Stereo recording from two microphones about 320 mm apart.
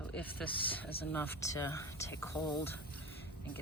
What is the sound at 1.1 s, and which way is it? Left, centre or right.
Speech, centre.